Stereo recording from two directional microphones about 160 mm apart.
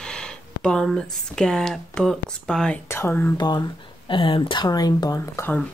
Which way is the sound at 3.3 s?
25° left (ahead or behind).